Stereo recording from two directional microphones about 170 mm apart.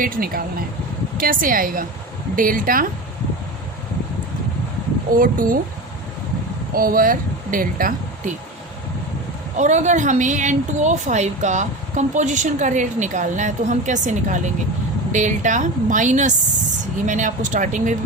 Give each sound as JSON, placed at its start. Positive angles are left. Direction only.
{"t": 0.0, "sound": "a woman's voice", "side_deg": -60}
{"t": 5.1, "sound": "a woman's voice", "side_deg": -55}
{"t": 6.7, "sound": "speech", "side_deg": -60}
{"t": 9.6, "sound": "a woman's voice", "side_deg": -45}